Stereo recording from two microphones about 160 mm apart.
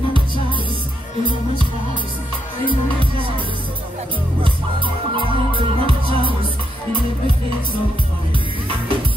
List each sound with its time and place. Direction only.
3.0 s music: 35° right (ahead or behind)
4.4 s music: 30° right (ahead or behind)